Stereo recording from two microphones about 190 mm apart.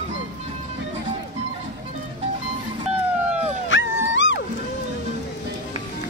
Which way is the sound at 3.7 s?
75° left (ahead or behind).